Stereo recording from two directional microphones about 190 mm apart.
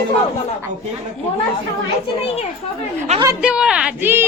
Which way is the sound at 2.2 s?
30° left (ahead or behind).